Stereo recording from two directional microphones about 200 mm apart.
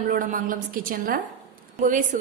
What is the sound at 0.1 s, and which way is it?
A woman's voice, 40° right (ahead or behind).